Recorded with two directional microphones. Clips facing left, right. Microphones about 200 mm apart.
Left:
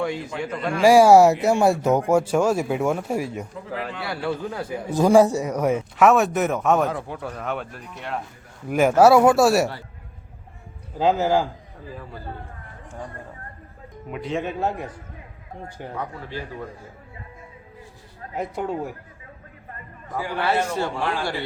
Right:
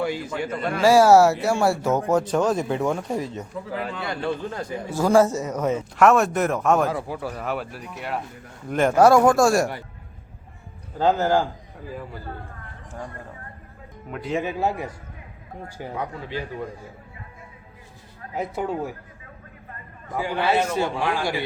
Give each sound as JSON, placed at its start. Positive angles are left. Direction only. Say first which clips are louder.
{"t": 0.0, "sound": "a man's voice", "louder": "even", "side_deg": 0}
{"t": 0.8, "sound": "speech", "louder": "left 2 dB", "side_deg": 15}
{"t": 6.1, "sound": "a man's voice", "louder": "left 1 dB", "side_deg": 0}
{"t": 8.7, "sound": "a man's voice", "louder": "left 1 dB", "side_deg": 10}
{"t": 10.9, "sound": "a man's voice", "louder": "even", "side_deg": 5}
{"t": 14.1, "sound": "a man's voice", "louder": "right 1 dB", "side_deg": -5}
{"t": 18.3, "sound": "a man's voice", "louder": "even", "side_deg": -5}
{"t": 20.1, "sound": "a man's voice", "louder": "right 1 dB", "side_deg": -20}